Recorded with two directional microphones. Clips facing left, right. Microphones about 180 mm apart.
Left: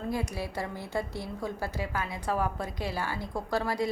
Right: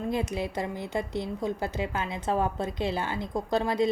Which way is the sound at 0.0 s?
20° right (ahead or behind).